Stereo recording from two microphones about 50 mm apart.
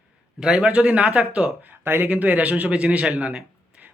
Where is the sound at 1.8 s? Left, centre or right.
Right.